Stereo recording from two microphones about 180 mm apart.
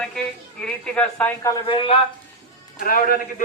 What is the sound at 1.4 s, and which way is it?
Speech, 25° left (ahead or behind).